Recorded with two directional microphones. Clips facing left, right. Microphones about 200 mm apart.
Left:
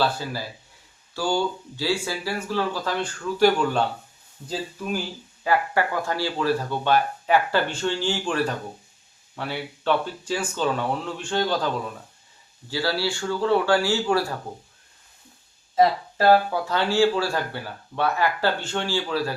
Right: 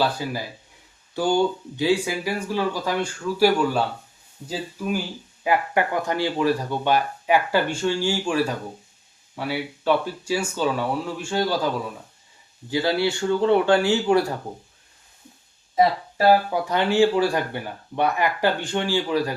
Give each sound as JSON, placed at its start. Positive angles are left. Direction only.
{"t": 0.0, "sound": "speech", "side_deg": -15}
{"t": 12.7, "sound": "speech", "side_deg": -20}
{"t": 15.7, "sound": "speech", "side_deg": -15}